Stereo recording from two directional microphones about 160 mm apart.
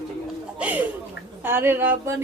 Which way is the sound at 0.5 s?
10° right (ahead or behind).